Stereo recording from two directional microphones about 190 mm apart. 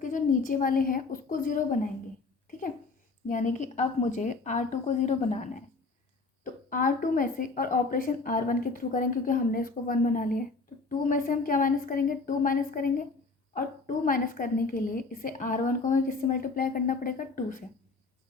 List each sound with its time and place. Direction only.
0.0 s a woman's voice: 40° left (ahead or behind)
2.5 s a sound: 45° left (ahead or behind)
3.2 s a woman's voice: 40° left (ahead or behind)